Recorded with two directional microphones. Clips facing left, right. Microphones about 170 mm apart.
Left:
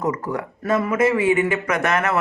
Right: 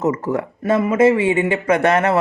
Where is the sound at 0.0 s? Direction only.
25° right (ahead or behind).